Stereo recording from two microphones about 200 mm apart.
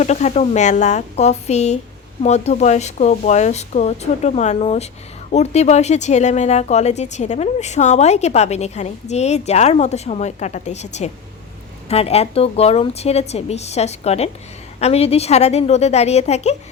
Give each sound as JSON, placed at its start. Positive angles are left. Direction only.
{"t": 0.0, "sound": "speech", "side_deg": 35}